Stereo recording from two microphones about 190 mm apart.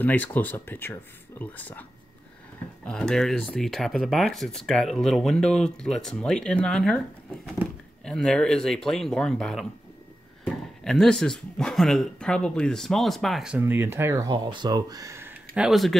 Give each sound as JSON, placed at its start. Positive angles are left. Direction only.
{"t": 0.0, "sound": "speech", "side_deg": 10}
{"t": 2.9, "sound": "speech", "side_deg": 5}